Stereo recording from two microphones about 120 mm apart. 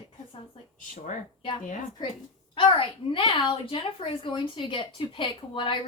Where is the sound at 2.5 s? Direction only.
45° left (ahead or behind).